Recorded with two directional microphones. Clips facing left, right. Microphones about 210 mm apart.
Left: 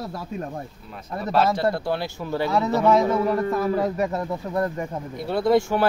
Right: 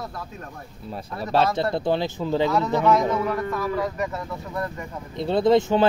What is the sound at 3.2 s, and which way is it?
Speech, 35° left (ahead or behind).